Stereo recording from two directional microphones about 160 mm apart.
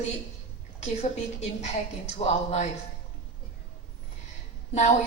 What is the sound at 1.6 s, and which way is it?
A woman's voice, 45° left (ahead or behind).